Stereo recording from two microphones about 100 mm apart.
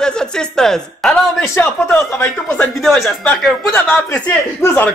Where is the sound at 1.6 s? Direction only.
20° left (ahead or behind).